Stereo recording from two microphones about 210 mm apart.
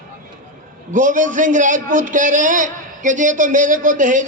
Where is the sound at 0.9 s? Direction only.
40° right (ahead or behind).